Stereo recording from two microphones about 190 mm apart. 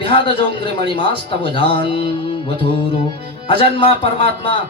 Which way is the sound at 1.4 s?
25° left (ahead or behind).